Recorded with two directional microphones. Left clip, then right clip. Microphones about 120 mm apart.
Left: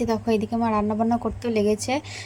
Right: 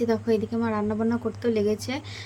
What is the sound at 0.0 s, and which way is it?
A woman's voice, 35° left (ahead or behind).